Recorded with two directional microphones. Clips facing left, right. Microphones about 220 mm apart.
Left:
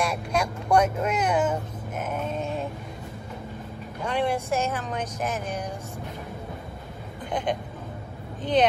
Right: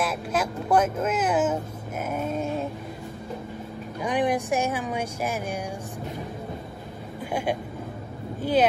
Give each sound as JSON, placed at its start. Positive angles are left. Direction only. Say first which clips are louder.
{"t": 0.0, "sound": "speech", "louder": "even", "side_deg": -5}
{"t": 4.0, "sound": "speech", "louder": "right 2 dB", "side_deg": -15}
{"t": 8.4, "sound": "speech", "louder": "even", "side_deg": -5}